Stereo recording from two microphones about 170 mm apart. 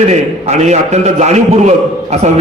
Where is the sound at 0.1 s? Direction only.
40° right (ahead or behind).